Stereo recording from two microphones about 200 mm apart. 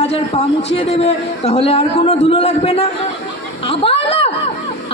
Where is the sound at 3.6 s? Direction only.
30° left (ahead or behind).